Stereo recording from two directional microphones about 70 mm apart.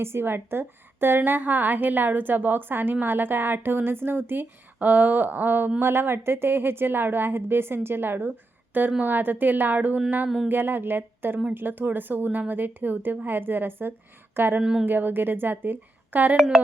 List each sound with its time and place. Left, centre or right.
0.0 s a woman's voice: right
10.2 s a sound: centre
10.5 s a woman's voice: right
14.6 s speech: centre
14.8 s a woman's voice: right